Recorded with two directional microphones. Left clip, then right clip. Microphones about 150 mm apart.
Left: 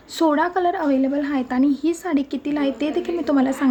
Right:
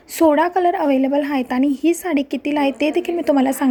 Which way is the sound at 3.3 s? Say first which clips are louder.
Right 2 dB; 50° right (ahead or behind).